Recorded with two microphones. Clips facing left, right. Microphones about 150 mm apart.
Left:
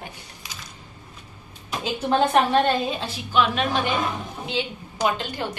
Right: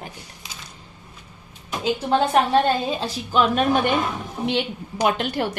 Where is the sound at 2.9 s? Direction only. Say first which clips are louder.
Right 2 dB; 40° right (ahead or behind).